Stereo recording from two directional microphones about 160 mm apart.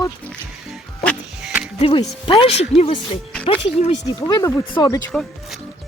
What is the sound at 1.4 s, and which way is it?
Music, 5° right (ahead or behind).